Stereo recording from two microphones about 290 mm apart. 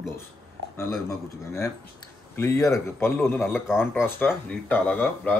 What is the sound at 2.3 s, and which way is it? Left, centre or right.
A man's voice, centre.